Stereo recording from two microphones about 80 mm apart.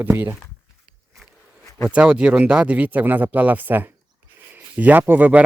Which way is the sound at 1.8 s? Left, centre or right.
Centre.